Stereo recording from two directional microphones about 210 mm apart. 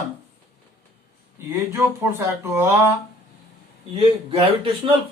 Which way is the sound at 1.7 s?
10° right (ahead or behind).